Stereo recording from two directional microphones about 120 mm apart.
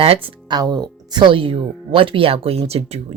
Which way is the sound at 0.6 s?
35° right (ahead or behind).